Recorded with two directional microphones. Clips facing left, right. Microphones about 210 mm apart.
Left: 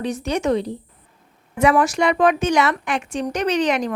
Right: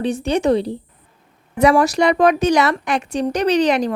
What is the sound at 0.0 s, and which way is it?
Speech, 30° right (ahead or behind).